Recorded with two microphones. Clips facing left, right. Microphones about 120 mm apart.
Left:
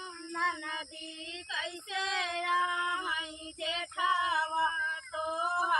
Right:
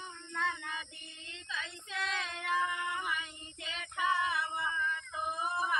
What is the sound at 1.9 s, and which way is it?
Child singing, 90° left.